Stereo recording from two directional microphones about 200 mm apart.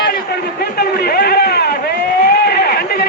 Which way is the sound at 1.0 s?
50° left (ahead or behind).